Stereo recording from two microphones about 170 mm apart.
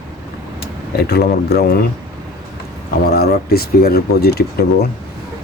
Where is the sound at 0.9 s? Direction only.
70° left (ahead or behind).